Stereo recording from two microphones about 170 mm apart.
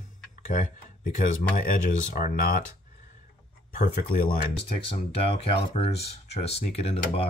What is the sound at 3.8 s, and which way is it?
Speech, 55° left (ahead or behind).